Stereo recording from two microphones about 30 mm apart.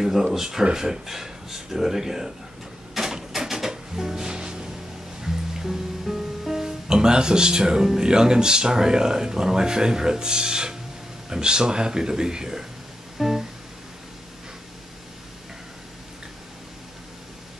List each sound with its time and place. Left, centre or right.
0.0 s speech: centre
2.9 s music: centre
5.2 s speech: centre
13.2 s music: centre